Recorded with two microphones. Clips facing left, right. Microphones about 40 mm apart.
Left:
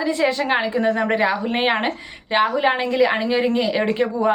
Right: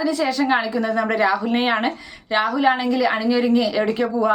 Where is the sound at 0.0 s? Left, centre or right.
Left.